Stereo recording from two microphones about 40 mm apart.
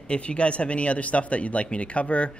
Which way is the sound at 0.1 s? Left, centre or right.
Left.